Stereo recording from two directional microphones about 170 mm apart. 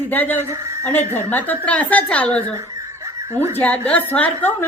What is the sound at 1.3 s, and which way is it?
A woman's voice, 10° left (ahead or behind).